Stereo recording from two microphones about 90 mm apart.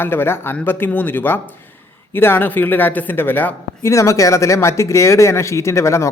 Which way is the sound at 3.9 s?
35° left (ahead or behind).